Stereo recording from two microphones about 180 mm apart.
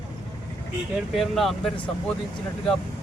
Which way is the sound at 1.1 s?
Centre (ahead or behind).